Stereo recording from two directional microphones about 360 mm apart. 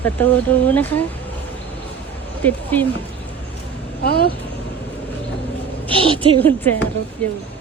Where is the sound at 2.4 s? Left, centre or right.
Centre.